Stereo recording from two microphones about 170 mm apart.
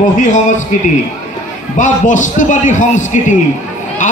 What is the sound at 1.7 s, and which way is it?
A man's voice, 50° left (ahead or behind).